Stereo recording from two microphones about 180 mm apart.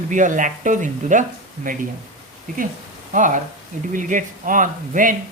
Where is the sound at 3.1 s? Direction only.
45° right (ahead or behind).